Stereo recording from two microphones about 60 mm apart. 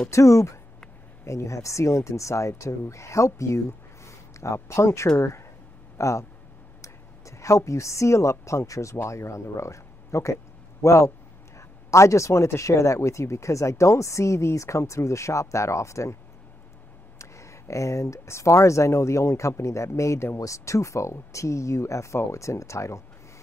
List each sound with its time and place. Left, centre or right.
0.1 s a woman's voice: left
17.2 s speech: left